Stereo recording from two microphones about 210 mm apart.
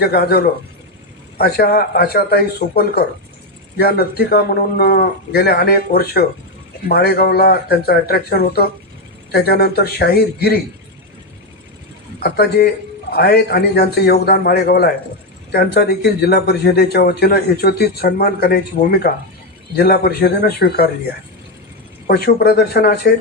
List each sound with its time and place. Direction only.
0.0 s speech: 50° left (ahead or behind)
12.2 s speech: 50° left (ahead or behind)
22.0 s speech: 45° left (ahead or behind)